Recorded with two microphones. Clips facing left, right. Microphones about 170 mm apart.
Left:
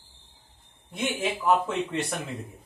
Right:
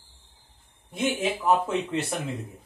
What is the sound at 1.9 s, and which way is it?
Speech, centre (ahead or behind).